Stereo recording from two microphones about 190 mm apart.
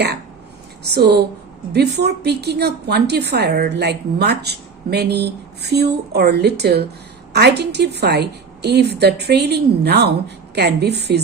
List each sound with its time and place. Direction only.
0.9 s a woman's voice: 60° right (ahead or behind)